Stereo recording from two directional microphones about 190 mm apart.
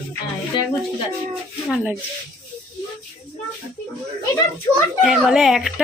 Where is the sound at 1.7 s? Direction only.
5° right (ahead or behind).